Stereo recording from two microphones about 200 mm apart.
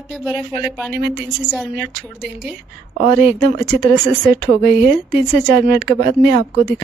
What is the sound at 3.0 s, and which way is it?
Speech, 55° right (ahead or behind).